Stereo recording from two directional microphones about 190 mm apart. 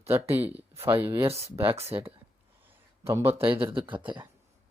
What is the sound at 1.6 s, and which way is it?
Speech, 30° right (ahead or behind).